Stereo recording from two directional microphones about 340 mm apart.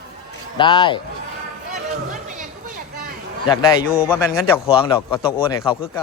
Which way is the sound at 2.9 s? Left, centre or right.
Right.